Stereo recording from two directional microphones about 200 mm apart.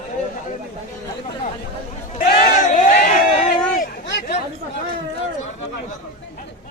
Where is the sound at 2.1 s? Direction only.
40° left (ahead or behind).